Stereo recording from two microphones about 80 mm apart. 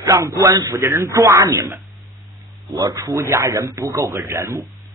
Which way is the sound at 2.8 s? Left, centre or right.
Right.